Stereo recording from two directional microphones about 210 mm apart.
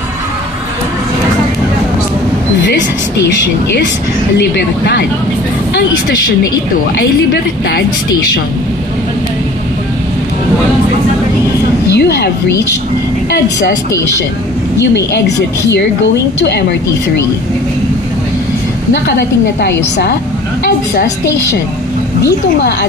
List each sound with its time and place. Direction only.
4.6 s a woman's voice: 55° left (ahead or behind)
11.9 s a sound: 55° left (ahead or behind)
13.3 s a woman's voice: 55° left (ahead or behind)
16.3 s a woman's voice: 55° left (ahead or behind)
19.0 s a woman's voice: 55° left (ahead or behind)